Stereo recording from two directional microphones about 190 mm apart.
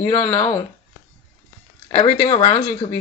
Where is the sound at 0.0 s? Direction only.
10° left (ahead or behind).